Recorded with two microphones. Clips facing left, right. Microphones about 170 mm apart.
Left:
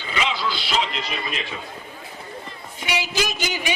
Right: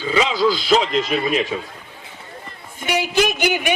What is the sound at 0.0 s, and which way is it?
Speech, 40° right (ahead or behind).